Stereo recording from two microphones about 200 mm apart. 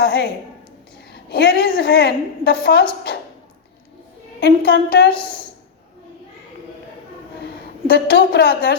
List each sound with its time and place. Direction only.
0.0 s a woman's voice: 55° left (ahead or behind)
4.4 s a woman's voice: 55° left (ahead or behind)
7.9 s a woman's voice: 50° left (ahead or behind)